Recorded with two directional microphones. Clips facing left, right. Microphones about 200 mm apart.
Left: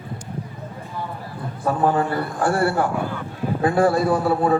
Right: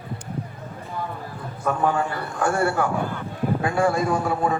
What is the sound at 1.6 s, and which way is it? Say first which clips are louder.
A man's voice: left 3 dB; 35° left (ahead or behind).